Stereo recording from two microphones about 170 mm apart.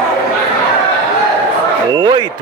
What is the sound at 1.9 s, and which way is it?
Speech, 25° right (ahead or behind).